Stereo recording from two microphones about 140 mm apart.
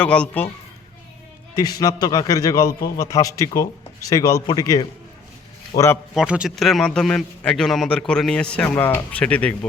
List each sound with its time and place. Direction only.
0.0 s a man's voice: 10° left (ahead or behind)
1.5 s a man's voice: 25° left (ahead or behind)
6.1 s a man's voice: 5° right (ahead or behind); by 9.6 s 10° left (ahead or behind)